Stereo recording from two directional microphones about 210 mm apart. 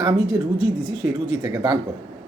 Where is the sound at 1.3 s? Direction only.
20° right (ahead or behind).